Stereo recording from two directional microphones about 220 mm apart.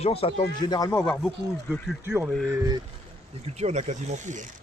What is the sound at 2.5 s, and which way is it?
Speech, 15° right (ahead or behind).